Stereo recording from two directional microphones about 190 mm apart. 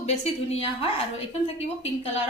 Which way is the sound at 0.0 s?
35° left (ahead or behind).